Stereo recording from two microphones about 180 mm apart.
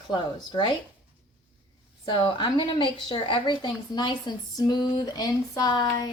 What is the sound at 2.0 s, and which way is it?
A woman's voice, 25° left (ahead or behind).